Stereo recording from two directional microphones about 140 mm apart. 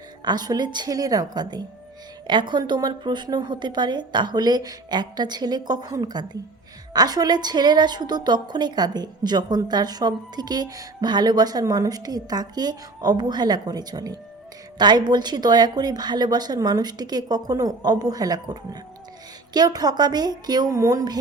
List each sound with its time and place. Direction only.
0.3 s a woman's voice: 30° right (ahead or behind)